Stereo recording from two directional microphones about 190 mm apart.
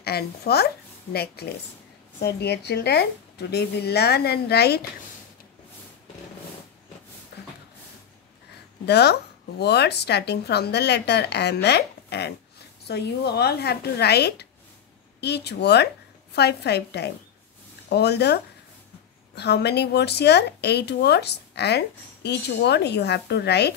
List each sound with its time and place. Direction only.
0.0 s a woman's voice: 55° left (ahead or behind)
7.3 s a sound: 60° left (ahead or behind)
8.8 s a woman's voice: 60° left (ahead or behind)